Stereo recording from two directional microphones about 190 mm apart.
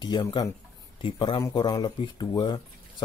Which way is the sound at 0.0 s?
25° left (ahead or behind).